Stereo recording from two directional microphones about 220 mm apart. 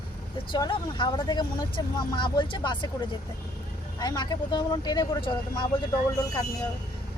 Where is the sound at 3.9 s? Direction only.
20° left (ahead or behind).